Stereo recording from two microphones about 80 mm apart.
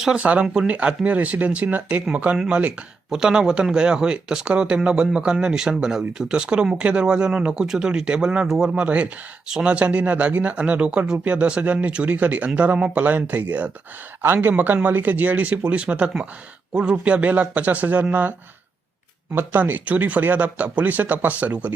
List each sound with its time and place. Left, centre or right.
0.0 s speech: centre
3.1 s speech: centre
8.7 s speech: centre